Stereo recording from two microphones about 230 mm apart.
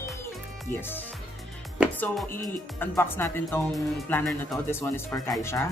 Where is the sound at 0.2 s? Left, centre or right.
Centre.